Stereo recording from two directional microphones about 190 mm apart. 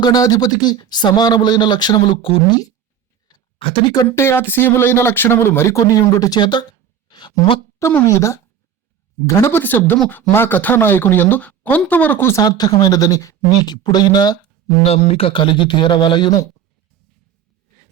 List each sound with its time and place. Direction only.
0.0 s speech: 20° left (ahead or behind)
7.1 s a sound: 25° left (ahead or behind)
7.8 s speech: 15° left (ahead or behind)
14.8 s speech: 30° left (ahead or behind)